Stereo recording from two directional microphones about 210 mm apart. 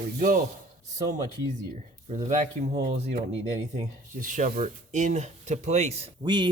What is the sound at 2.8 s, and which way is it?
Speech, 30° right (ahead or behind).